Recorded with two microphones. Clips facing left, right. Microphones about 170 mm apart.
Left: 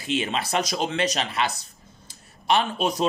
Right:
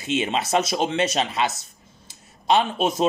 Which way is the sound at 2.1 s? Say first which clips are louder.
Right 3 dB; 20° right (ahead or behind).